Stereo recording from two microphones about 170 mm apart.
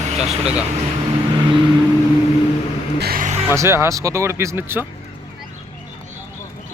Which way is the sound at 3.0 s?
60° right (ahead or behind).